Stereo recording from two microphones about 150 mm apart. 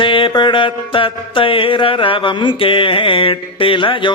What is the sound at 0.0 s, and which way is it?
Mantra, 35° left (ahead or behind).